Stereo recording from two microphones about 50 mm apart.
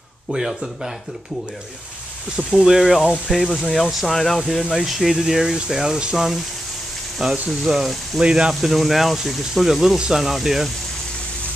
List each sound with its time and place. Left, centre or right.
0.3 s speech: centre
2.5 s speech: centre
3.6 s speech: centre
7.4 s speech: centre
8.2 s speech: centre
8.5 s speech: centre